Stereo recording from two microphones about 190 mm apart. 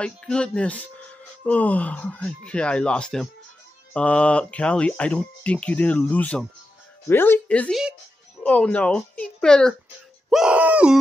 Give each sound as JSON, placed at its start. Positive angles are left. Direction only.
{"t": 0.0, "sound": "speech", "side_deg": 5}
{"t": 10.3, "sound": "groan", "side_deg": -5}